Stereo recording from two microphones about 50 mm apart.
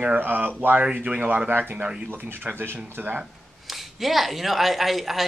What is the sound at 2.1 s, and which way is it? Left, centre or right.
Speech, right.